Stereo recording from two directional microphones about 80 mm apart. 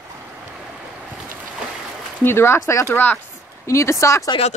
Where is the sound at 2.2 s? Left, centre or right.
Left.